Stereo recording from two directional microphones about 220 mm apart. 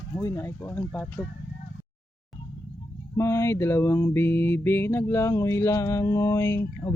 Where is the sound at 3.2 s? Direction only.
15° left (ahead or behind).